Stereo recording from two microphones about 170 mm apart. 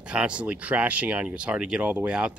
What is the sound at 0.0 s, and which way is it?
Speech, 5° right (ahead or behind).